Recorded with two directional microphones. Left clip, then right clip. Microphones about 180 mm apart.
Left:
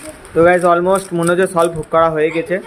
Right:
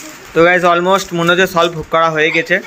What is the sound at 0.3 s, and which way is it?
Speech, 5° left (ahead or behind).